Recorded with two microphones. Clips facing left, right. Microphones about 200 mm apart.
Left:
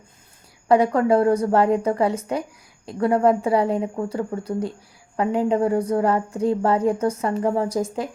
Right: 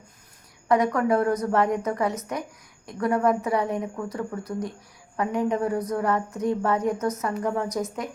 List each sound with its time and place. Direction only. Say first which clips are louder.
0.7 s speech: left 4 dB; 30° left (ahead or behind)